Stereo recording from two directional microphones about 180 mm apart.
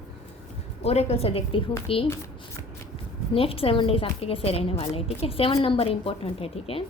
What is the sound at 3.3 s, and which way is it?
A woman's voice, 30° left (ahead or behind).